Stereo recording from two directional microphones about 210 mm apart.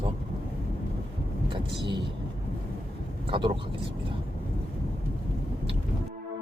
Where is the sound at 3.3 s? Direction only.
25° right (ahead or behind).